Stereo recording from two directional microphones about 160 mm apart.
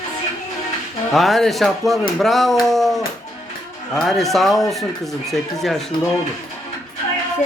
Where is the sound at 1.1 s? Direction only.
Centre (ahead or behind).